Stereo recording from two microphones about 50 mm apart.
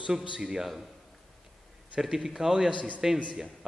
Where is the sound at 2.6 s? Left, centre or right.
Right.